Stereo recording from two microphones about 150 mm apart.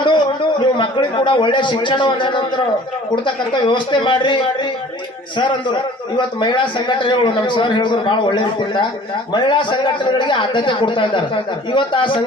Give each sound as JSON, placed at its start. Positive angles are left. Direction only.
{"t": 0.0, "sound": "a man's voice", "side_deg": 30}
{"t": 5.4, "sound": "a man's voice", "side_deg": 30}